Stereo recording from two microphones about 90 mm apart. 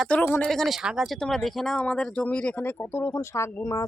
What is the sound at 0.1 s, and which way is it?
Speech, 20° left (ahead or behind).